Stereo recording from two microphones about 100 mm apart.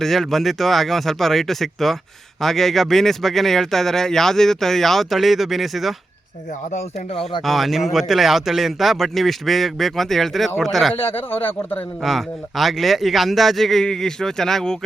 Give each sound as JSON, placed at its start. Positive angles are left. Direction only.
{"t": 0.0, "sound": "speech", "side_deg": 0}
{"t": 7.4, "sound": "speech", "side_deg": 0}
{"t": 11.0, "sound": "speech", "side_deg": 20}
{"t": 12.0, "sound": "speech", "side_deg": 0}